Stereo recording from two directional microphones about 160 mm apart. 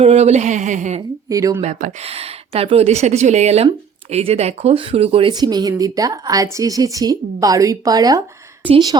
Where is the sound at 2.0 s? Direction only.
40° right (ahead or behind).